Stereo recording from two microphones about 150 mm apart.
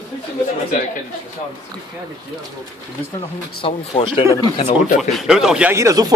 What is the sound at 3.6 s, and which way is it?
Speech, 35° left (ahead or behind).